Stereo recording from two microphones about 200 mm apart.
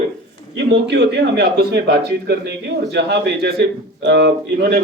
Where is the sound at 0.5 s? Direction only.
60° right (ahead or behind).